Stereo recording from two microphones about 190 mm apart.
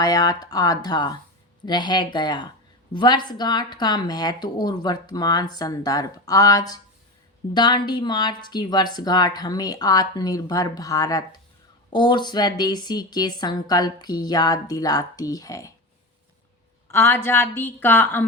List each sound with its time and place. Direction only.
0.0 s speech: 20° left (ahead or behind)
16.9 s a woman's voice: 10° left (ahead or behind)